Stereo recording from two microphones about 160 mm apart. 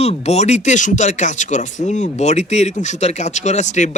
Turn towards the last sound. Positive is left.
turn(degrees=50)  # may be behind; listen again after turning